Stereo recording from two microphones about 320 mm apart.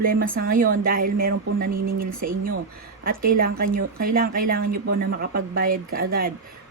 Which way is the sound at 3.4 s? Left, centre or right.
Right.